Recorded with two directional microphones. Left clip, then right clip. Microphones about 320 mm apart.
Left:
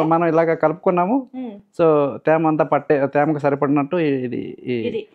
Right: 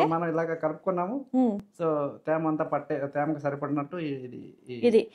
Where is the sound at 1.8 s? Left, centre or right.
Left.